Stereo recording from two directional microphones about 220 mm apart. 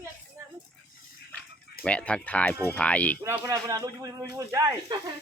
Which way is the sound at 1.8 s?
5° left (ahead or behind).